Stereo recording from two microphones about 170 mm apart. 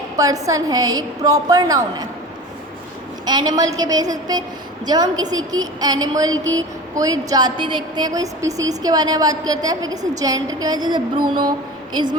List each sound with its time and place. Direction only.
0.2 s a woman's voice: 20° right (ahead or behind)
3.2 s a woman's voice: 25° right (ahead or behind)